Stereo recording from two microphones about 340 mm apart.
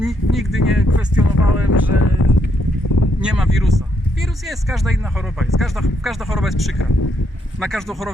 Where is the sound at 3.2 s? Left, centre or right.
Centre.